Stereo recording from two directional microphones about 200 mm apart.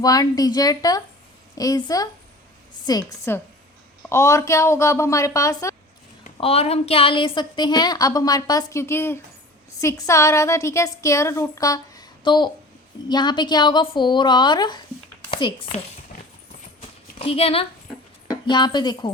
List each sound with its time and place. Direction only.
0.0 s a woman's voice: 20° left (ahead or behind)
6.3 s a woman's voice: 30° left (ahead or behind)
17.2 s a woman's voice: 30° left (ahead or behind)